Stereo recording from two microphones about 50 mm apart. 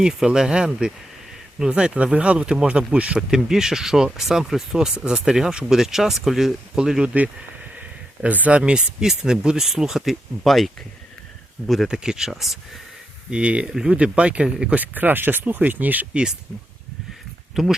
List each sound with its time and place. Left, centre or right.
0.0 s speech: centre
3.2 s speech: centre
7.0 s speech: right; by 10.7 s centre
11.9 s speech: centre
13.3 s speech: right
14.8 s speech: right
17.5 s speech: centre